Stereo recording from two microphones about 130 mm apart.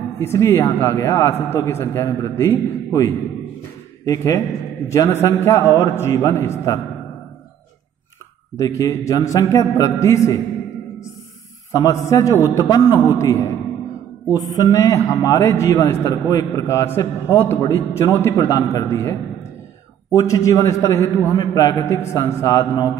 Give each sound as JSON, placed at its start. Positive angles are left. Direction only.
{"t": 0.2, "sound": "a man's voice", "side_deg": 20}
{"t": 8.5, "sound": "a man's voice", "side_deg": 25}
{"t": 11.7, "sound": "a man's voice", "side_deg": 25}